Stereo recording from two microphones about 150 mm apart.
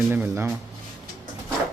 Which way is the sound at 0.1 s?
15° right (ahead or behind).